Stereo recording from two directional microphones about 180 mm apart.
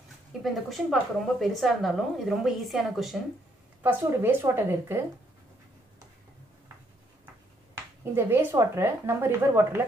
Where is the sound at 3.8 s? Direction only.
10° right (ahead or behind).